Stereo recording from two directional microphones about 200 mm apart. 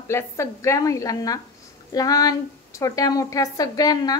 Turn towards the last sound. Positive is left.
turn(degrees=20)  # may be behind; listen again after turning